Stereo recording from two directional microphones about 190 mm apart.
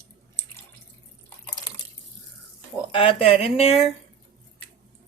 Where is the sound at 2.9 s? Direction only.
30° left (ahead or behind).